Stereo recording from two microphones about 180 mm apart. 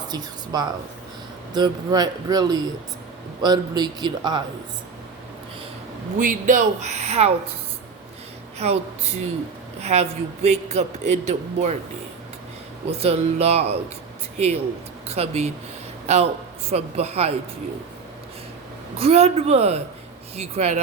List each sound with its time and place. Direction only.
0.1 s speech: 25° right (ahead or behind)
6.1 s a man's voice: 45° right (ahead or behind)
8.5 s a woman's voice: 35° right (ahead or behind)
9.8 s a man's voice: 35° right (ahead or behind)
12.9 s a man's voice: 35° right (ahead or behind)
18.9 s a man's voice: 35° right (ahead or behind)